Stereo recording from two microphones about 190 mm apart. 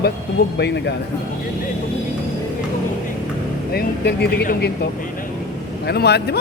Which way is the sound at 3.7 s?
55° left (ahead or behind).